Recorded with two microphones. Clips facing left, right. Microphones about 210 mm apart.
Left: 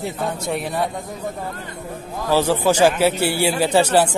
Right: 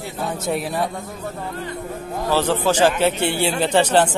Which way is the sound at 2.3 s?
10° left (ahead or behind).